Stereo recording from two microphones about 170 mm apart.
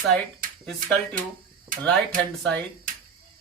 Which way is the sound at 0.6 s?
5° left (ahead or behind).